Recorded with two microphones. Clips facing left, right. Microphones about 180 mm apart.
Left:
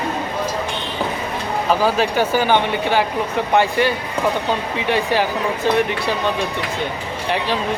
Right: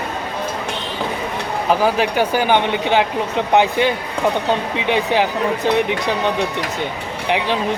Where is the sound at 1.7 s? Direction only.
15° right (ahead or behind).